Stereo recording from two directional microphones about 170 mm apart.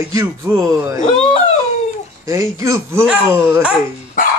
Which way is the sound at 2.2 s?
20° right (ahead or behind).